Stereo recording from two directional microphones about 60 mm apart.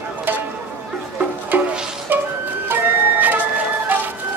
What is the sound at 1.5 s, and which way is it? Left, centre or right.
Music, right.